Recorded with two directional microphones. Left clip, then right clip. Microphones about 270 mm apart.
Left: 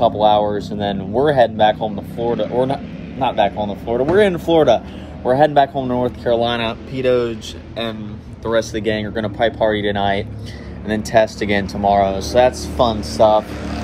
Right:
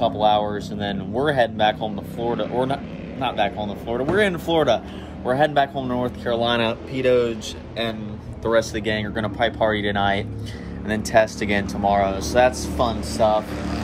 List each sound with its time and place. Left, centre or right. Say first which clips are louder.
0.0 s speech: left 5 dB; centre
2.2 s speech: left 5 dB; left
3.2 s speech: left 6 dB; centre
6.9 s speech: left 3 dB; centre